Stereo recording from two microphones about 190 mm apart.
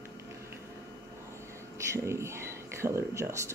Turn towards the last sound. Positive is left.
turn(degrees=-15)  # may be behind; listen again after turning